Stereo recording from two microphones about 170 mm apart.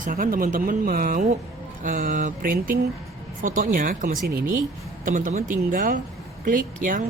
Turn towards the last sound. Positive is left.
turn(degrees=-50)  # may be behind; listen again after turning